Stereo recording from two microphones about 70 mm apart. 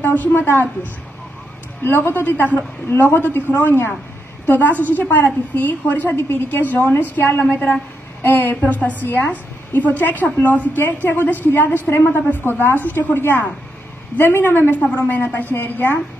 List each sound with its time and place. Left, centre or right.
0.0 s a woman's voice: left
1.8 s a woman's voice: left